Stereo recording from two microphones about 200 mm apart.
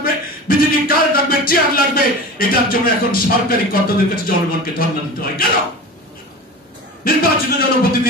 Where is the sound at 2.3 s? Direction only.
45° left (ahead or behind).